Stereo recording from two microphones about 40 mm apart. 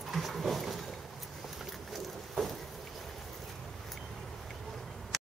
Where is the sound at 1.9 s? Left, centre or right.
Centre.